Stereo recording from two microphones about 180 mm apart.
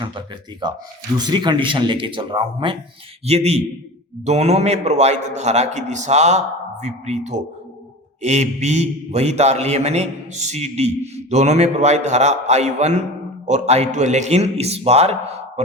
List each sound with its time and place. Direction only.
0.0 s a man's voice: 25° right (ahead or behind)